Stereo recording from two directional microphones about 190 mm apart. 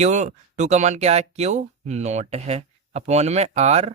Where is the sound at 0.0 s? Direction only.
40° right (ahead or behind).